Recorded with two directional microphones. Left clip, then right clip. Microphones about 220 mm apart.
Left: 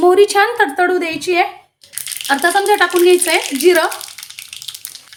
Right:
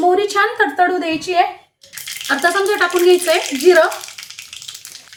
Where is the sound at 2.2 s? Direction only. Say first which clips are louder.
Left 2 dB; 25° left (ahead or behind).